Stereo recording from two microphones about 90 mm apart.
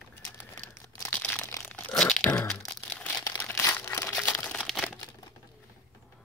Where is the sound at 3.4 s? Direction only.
25° left (ahead or behind).